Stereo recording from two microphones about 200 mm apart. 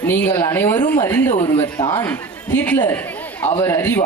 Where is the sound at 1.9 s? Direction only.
10° left (ahead or behind).